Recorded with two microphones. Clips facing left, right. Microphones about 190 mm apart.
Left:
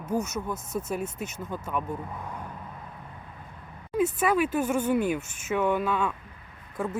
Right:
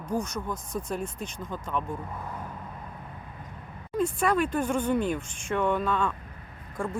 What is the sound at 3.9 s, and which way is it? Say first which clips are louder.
Speech: left 1 dB; 5° left (ahead or behind).